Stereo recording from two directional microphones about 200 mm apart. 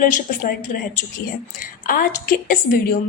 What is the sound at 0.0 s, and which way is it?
Speech, 40° left (ahead or behind).